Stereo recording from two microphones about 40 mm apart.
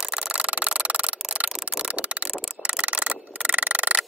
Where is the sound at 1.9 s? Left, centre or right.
Right.